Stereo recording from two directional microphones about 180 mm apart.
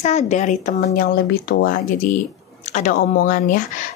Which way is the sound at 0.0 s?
40° left (ahead or behind).